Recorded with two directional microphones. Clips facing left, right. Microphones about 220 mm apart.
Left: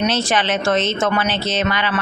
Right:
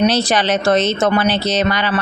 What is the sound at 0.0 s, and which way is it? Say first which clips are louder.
Speech: right 4 dB; 35° right (ahead or behind).